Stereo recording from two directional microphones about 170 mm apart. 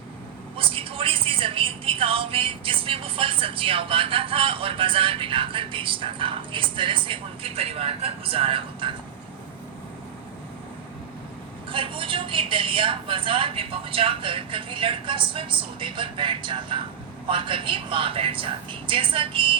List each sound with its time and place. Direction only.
0.5 s a woman's voice: 30° right (ahead or behind)
11.7 s a woman's voice: 30° right (ahead or behind)